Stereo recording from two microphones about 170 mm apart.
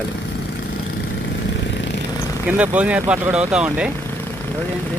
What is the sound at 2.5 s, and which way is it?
Speech, 10° right (ahead or behind).